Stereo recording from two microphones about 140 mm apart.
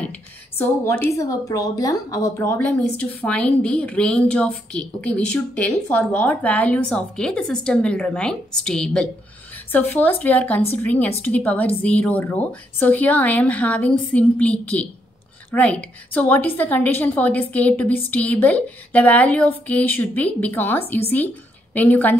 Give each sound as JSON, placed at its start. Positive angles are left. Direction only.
{"t": 0.6, "sound": "a woman's voice", "side_deg": 15}
{"t": 2.6, "sound": "a woman's voice", "side_deg": 10}